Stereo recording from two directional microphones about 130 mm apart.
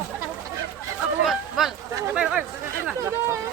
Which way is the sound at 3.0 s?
20° right (ahead or behind).